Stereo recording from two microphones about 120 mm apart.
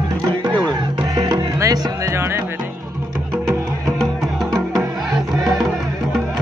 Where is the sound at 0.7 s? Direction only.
40° right (ahead or behind); by 2.6 s 20° right (ahead or behind).